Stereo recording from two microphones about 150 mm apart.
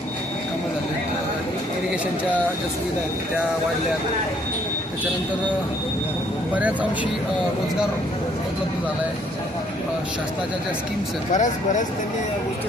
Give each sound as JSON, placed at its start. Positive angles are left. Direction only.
{"t": 11.3, "sound": "speech", "side_deg": 55}